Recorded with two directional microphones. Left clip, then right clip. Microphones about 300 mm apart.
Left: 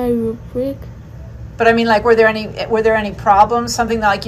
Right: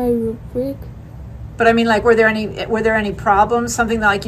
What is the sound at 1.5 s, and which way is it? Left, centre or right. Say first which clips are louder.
A woman's voice: left 1 dB; centre.